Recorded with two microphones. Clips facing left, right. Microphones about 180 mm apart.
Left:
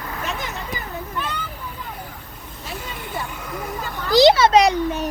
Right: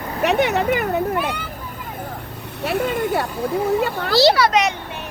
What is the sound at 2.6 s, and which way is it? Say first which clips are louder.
Vehicle: right 14 dB; 65° right (ahead or behind).